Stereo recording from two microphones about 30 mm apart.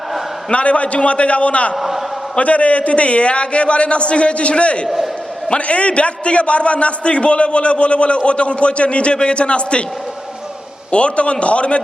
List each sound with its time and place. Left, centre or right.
0.5 s a man's voice: left
1.7 s a man's voice: centre
2.4 s a man's voice: left
10.9 s a man's voice: left